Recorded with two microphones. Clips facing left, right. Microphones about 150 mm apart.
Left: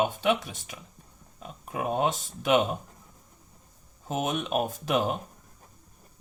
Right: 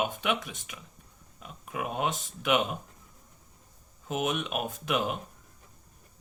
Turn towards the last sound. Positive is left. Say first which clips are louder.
# left 3 dB
turn(degrees=35)  # may be behind; listen again after turning